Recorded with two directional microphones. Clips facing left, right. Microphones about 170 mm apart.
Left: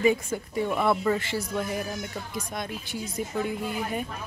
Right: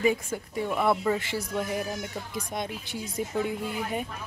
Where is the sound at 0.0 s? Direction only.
Centre (ahead or behind); by 4.0 s 20° right (ahead or behind).